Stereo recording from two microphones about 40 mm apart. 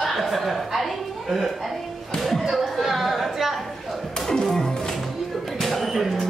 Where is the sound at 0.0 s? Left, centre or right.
Centre.